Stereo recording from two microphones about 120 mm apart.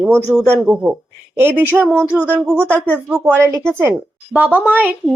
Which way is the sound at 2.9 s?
10° right (ahead or behind).